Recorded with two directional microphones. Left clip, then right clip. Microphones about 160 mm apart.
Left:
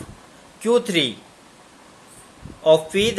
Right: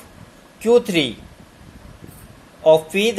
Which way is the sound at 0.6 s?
5° right (ahead or behind).